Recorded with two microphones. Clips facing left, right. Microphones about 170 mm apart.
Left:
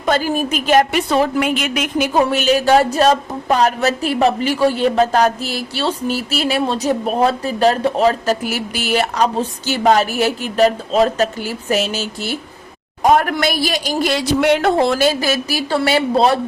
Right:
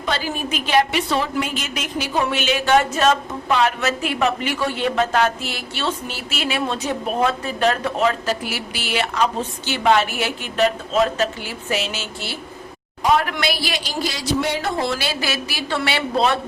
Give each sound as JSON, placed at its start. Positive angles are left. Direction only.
{"t": 0.0, "sound": "a woman's voice", "side_deg": 45}
{"t": 2.1, "sound": "a woman's voice", "side_deg": 40}
{"t": 14.0, "sound": "a woman's voice", "side_deg": 60}